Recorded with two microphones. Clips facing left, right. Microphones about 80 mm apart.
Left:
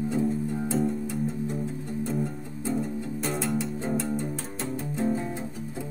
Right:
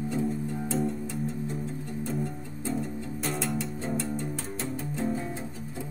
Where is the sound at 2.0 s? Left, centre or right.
Centre.